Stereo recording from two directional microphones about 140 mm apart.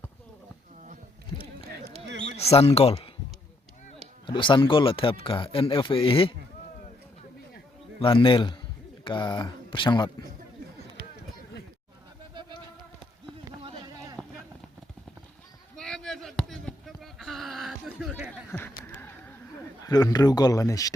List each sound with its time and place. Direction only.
1.8 s a sound: 45° right (ahead or behind)
2.4 s speech: 45° left (ahead or behind)
4.3 s speech: 35° left (ahead or behind)
7.9 s speech: 40° left (ahead or behind)
13.6 s a sound: 40° right (ahead or behind)
14.2 s clip-clop: 5° left (ahead or behind)
15.7 s basketball bounce: 5° left (ahead or behind)
18.5 s a sound: 15° left (ahead or behind)
19.8 s speech: 25° left (ahead or behind)